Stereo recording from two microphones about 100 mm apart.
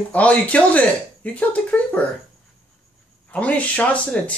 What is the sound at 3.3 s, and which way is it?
Speech, 15° left (ahead or behind).